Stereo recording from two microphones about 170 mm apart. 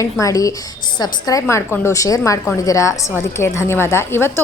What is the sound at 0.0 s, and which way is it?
A woman's voice, 20° left (ahead or behind).